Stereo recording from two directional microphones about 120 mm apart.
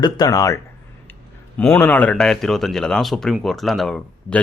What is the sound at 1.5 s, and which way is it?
Speech, 10° left (ahead or behind).